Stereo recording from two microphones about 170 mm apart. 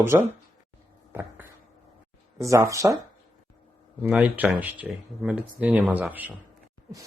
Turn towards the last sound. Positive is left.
turn(degrees=-10)  # may be behind; listen again after turning